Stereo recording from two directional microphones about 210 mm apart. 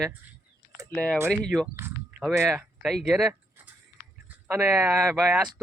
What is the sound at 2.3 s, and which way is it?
Speech, 10° right (ahead or behind).